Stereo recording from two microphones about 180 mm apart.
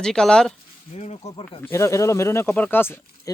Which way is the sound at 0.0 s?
5° left (ahead or behind).